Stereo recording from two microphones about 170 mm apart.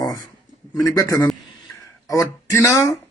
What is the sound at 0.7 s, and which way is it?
A man's voice, 20° left (ahead or behind).